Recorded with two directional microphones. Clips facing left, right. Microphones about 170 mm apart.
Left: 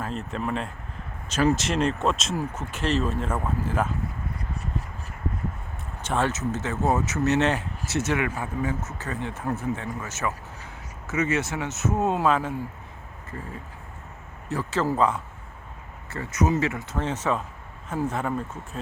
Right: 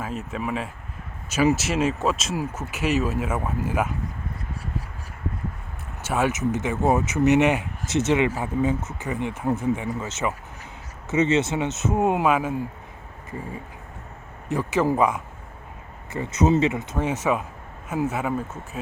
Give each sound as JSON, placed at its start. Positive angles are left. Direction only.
{"t": 0.0, "sound": "speech", "side_deg": -5}
{"t": 6.0, "sound": "speech", "side_deg": -10}
{"t": 14.5, "sound": "speech", "side_deg": -15}